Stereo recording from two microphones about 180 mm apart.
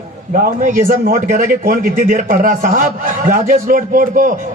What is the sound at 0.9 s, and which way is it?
A man's voice, 50° right (ahead or behind).